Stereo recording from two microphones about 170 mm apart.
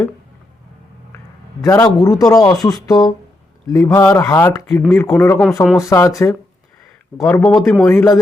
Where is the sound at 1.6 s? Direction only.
20° left (ahead or behind).